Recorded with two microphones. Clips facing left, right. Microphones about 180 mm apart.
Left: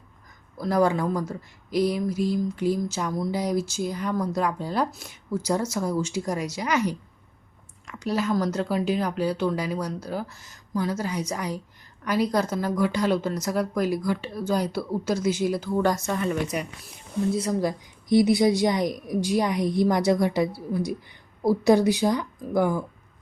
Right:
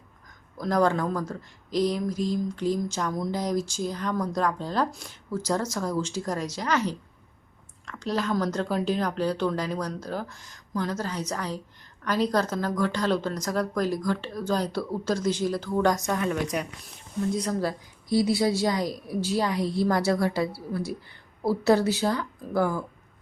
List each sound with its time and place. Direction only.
0.5 s a woman's voice: 10° left (ahead or behind)